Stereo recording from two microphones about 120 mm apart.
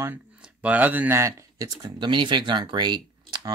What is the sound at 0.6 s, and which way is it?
Speech, 10° right (ahead or behind).